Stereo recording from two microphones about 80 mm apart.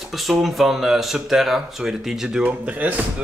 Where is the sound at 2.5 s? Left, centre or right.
Centre.